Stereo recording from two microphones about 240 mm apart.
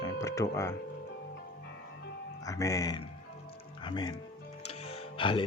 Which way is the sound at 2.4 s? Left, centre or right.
Centre.